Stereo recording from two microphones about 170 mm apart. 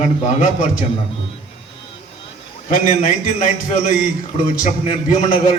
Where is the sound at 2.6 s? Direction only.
45° left (ahead or behind).